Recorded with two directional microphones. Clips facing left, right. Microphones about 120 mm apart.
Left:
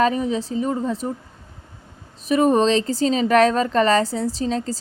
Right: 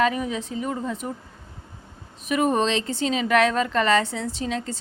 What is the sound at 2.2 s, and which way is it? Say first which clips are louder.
Speech: left 5 dB; 35° left (ahead or behind).